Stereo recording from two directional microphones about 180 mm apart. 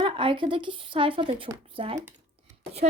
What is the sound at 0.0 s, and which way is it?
Speech, 30° right (ahead or behind).